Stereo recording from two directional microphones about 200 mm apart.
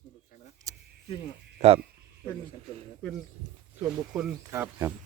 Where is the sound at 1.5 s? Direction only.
30° right (ahead or behind).